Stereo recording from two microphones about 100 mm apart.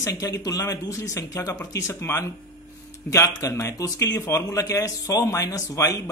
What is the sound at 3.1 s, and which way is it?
Speech, 30° left (ahead or behind).